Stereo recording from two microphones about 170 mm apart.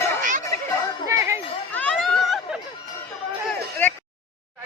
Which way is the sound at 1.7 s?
5° left (ahead or behind).